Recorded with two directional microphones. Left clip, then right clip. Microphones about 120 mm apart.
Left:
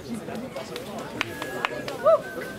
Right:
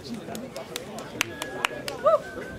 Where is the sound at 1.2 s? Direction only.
40° right (ahead or behind).